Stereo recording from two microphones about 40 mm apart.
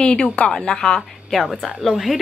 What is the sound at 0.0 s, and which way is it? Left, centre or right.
A woman's voice, left.